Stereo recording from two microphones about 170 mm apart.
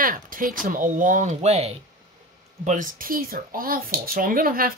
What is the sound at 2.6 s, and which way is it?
Speech, 50° right (ahead or behind).